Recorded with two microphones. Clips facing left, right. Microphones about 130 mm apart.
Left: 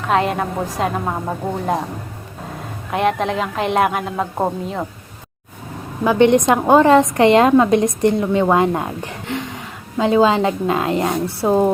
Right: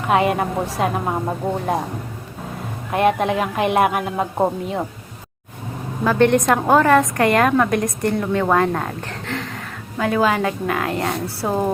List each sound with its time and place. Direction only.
0.1 s a man's voice: 5° right (ahead or behind)
2.9 s a man's voice: 5° right (ahead or behind)
6.1 s a woman's voice: 15° left (ahead or behind)